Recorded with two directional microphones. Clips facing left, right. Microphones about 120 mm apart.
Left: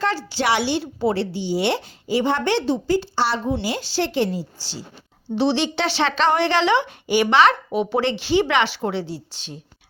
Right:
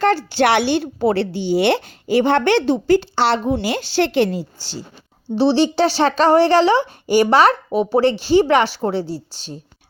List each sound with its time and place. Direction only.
0.0 s a woman's voice: 55° right (ahead or behind)
5.4 s speech: 35° right (ahead or behind)